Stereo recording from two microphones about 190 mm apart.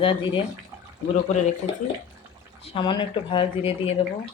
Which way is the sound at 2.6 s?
25° left (ahead or behind).